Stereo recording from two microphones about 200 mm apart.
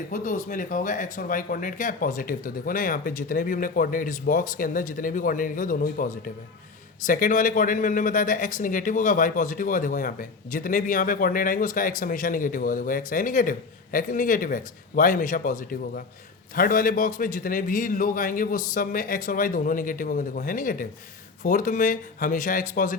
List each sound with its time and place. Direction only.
0.1 s speech: 40° left (ahead or behind)